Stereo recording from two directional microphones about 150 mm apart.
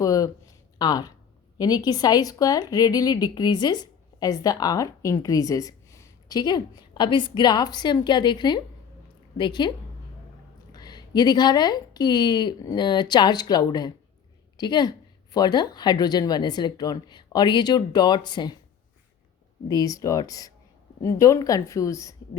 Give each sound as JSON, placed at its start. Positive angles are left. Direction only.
{"t": 0.0, "sound": "speech", "side_deg": 25}
{"t": 19.6, "sound": "speech", "side_deg": 25}